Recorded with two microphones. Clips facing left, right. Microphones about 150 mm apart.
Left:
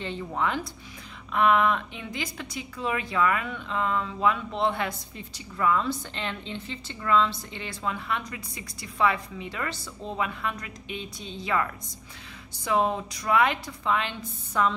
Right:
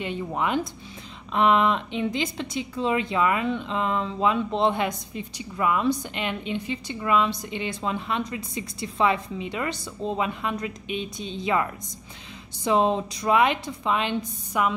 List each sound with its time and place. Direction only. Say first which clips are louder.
0.0 s a woman's voice: right 2 dB; 15° right (ahead or behind)